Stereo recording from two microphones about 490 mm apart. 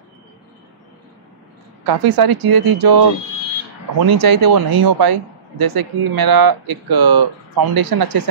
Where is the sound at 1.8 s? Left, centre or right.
Right.